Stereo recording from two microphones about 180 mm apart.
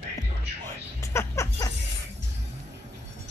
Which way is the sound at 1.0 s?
15° left (ahead or behind).